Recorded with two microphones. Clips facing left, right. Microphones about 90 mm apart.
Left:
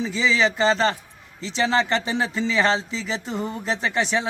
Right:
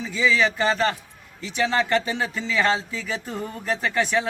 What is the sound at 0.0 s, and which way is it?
Speech, 25° left (ahead or behind).